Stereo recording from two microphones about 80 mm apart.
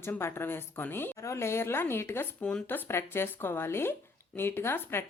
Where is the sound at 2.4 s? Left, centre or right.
Centre.